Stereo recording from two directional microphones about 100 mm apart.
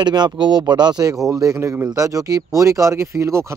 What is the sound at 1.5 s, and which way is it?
Speech, 20° right (ahead or behind).